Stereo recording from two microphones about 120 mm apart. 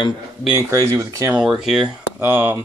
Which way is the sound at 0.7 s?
30° right (ahead or behind).